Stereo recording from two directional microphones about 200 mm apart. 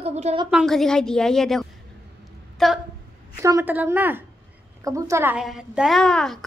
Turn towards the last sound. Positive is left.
turn(degrees=5)  # may be behind; listen again after turning